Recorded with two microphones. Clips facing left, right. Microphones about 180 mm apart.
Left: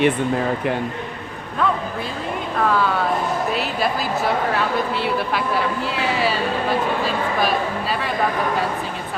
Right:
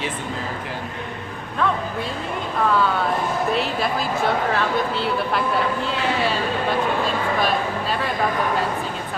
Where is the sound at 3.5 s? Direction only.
Centre (ahead or behind).